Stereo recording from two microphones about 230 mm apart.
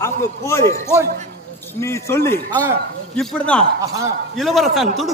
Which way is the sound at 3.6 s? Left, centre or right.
Centre.